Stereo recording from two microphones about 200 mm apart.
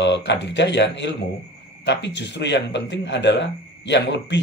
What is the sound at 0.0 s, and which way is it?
A man's voice, 60° left (ahead or behind).